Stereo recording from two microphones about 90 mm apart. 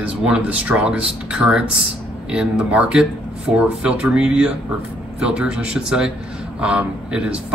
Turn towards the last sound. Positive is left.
turn(degrees=-15)  # may be behind; listen again after turning